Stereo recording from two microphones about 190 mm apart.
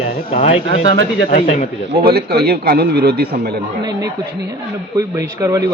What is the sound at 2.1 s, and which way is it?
Speech, 55° right (ahead or behind).